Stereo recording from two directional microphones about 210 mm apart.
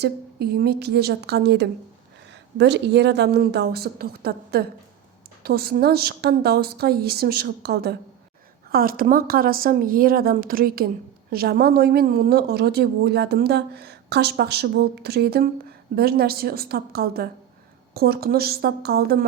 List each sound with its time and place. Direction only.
0.0 s a woman's voice: 50° right (ahead or behind)